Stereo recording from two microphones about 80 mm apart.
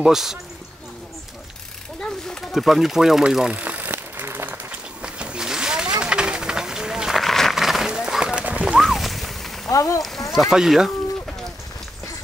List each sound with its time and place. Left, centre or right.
0.0 s speech: centre
2.0 s speech: centre
2.5 s a sound: centre; by 4.7 s right
5.0 s vehicle: centre
8.7 s a sound: centre
9.7 s speech: left
10.3 s speech: centre